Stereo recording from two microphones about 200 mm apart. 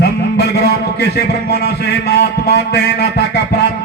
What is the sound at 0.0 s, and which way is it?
A man's voice, 50° left (ahead or behind).